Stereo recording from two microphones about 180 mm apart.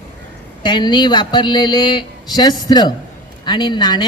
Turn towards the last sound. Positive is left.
turn(degrees=25)  # may be behind; listen again after turning